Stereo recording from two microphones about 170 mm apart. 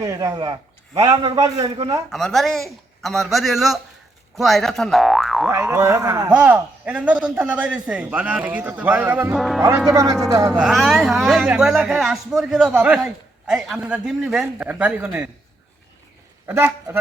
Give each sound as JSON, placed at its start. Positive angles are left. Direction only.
{"t": 0.0, "sound": "a man's voice", "side_deg": -20}
{"t": 2.0, "sound": "speech", "side_deg": 0}
{"t": 5.5, "sound": "a man's voice", "side_deg": -15}
{"t": 6.3, "sound": "a man's voice", "side_deg": -5}
{"t": 10.5, "sound": "speech", "side_deg": -5}
{"t": 16.5, "sound": "a man's voice", "side_deg": -10}